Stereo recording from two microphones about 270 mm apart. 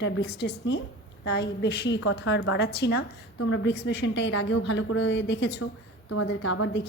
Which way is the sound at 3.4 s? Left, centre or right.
Left.